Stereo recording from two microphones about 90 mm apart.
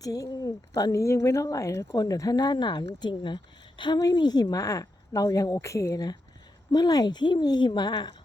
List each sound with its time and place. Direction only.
0.0 s a woman's voice: 40° left (ahead or behind)